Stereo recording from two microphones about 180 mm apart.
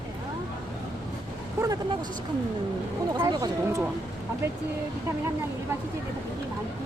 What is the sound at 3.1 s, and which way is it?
Speech, 20° right (ahead or behind).